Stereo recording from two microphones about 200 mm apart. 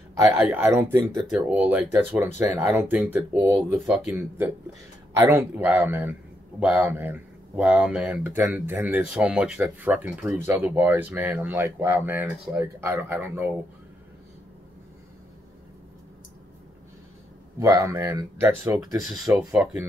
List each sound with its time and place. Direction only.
0.1 s speech: 15° right (ahead or behind)
17.6 s speech: 15° right (ahead or behind)
19.3 s speech: 5° right (ahead or behind)